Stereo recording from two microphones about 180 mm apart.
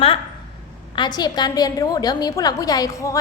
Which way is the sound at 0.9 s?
25° left (ahead or behind).